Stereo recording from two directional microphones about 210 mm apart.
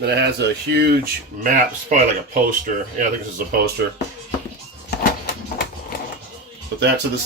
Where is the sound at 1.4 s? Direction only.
40° right (ahead or behind).